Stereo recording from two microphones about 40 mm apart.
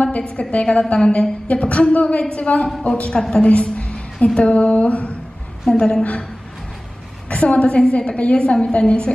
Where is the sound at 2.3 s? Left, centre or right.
Left.